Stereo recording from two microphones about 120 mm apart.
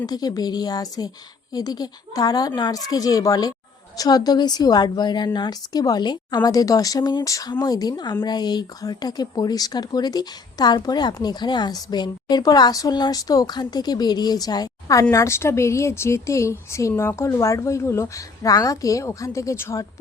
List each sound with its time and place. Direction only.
0.0 s speech: 30° left (ahead or behind)